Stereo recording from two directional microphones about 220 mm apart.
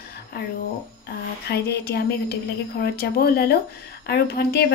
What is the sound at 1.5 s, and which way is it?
Speech, 50° left (ahead or behind).